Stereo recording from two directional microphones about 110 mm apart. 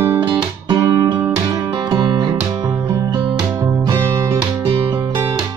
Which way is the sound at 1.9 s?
35° right (ahead or behind).